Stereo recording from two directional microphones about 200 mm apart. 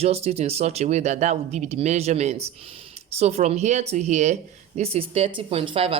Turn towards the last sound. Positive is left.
turn(degrees=-30)  # may be behind; listen again after turning